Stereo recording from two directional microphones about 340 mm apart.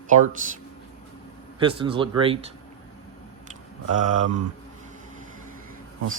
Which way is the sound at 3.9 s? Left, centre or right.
Right.